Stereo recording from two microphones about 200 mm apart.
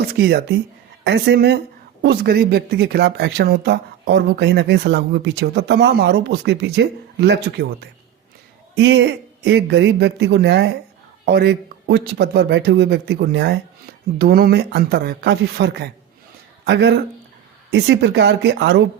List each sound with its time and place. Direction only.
0.0 s speech: 50° right (ahead or behind)